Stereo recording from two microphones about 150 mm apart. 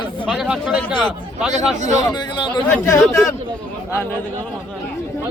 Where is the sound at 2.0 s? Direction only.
30° left (ahead or behind).